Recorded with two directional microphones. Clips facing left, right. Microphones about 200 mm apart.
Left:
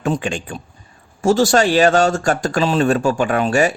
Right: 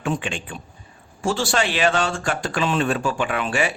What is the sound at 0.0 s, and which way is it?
A man's voice, 40° left (ahead or behind).